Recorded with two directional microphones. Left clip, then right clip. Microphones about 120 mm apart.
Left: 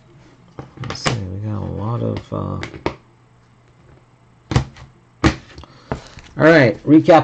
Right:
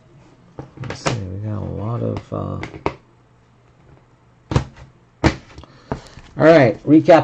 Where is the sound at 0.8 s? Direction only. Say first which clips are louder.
Left 1 dB; 5° left (ahead or behind).